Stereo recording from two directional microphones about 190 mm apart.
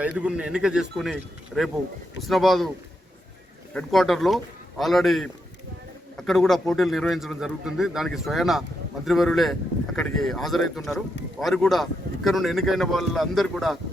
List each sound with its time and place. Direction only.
0.0 s a man's voice: 5° right (ahead or behind)
3.8 s a man's voice: centre (ahead or behind)